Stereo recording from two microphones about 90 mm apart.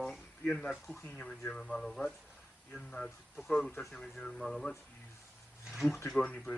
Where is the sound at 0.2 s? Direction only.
15° left (ahead or behind).